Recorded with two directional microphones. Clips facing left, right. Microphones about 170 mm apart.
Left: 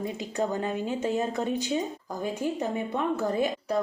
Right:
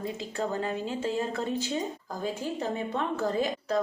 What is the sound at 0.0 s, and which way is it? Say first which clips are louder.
A woman's voice: left 3 dB; 20° left (ahead or behind).